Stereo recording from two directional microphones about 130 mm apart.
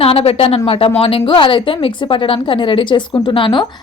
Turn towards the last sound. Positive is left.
turn(degrees=40)  # may be behind; listen again after turning